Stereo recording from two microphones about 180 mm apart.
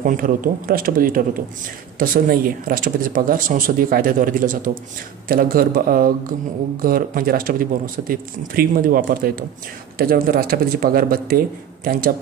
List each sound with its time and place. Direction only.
0.0 s speech: 50° right (ahead or behind)